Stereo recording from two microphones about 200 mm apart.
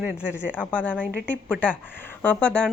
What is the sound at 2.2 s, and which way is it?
Speech, 5° left (ahead or behind).